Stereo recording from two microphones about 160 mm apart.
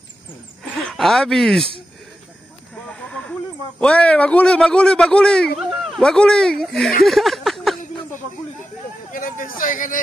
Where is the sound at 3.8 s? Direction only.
5° left (ahead or behind).